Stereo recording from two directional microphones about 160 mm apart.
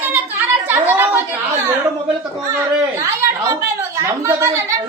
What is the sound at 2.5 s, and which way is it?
A woman's voice, 15° right (ahead or behind).